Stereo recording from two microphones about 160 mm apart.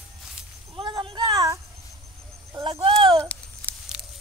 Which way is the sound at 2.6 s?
35° right (ahead or behind).